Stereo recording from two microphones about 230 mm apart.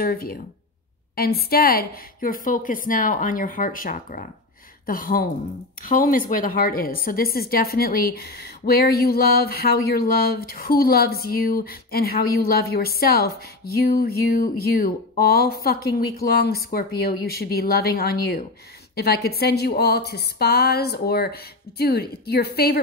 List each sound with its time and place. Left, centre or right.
0.0 s a woman's voice: left